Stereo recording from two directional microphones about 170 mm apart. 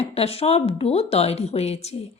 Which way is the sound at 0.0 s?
35° left (ahead or behind).